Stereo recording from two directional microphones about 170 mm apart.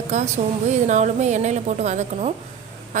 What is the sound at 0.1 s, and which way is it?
A woman's voice, 45° right (ahead or behind).